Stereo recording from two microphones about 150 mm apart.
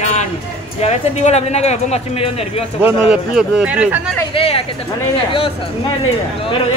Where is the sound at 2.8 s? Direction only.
10° right (ahead or behind).